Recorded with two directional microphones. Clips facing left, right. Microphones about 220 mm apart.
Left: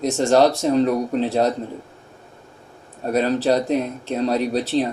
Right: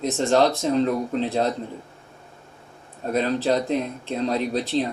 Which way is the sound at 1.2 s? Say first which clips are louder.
Left 4 dB; 45° left (ahead or behind).